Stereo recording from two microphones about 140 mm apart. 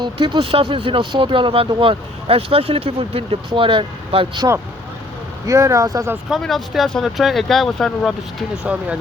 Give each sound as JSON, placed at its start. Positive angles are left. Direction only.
{"t": 0.0, "sound": "speech", "side_deg": -35}
{"t": 5.5, "sound": "speech", "side_deg": -20}
{"t": 6.3, "sound": "speech", "side_deg": 0}
{"t": 8.6, "sound": "speech", "side_deg": -10}